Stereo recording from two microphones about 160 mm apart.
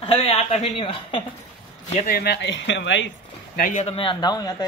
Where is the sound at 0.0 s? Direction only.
40° left (ahead or behind).